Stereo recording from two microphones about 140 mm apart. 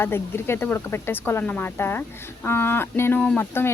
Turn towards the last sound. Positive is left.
turn(degrees=15)  # may be behind; listen again after turning